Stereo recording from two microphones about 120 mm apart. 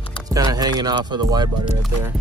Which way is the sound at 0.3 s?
30° right (ahead or behind).